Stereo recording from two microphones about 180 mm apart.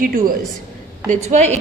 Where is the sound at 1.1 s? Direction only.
40° right (ahead or behind).